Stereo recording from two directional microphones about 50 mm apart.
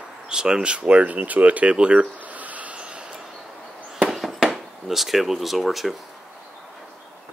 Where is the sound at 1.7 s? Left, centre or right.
Right.